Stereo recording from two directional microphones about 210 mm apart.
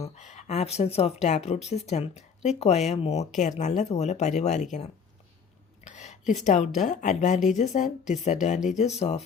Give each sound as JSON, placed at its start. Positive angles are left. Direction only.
{"t": 0.0, "sound": "speech", "side_deg": 35}
{"t": 5.8, "sound": "a sound", "side_deg": 35}
{"t": 6.4, "sound": "speech", "side_deg": 35}